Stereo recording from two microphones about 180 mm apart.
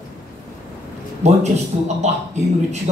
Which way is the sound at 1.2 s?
40° right (ahead or behind).